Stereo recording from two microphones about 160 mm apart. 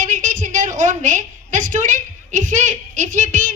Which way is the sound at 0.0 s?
55° right (ahead or behind).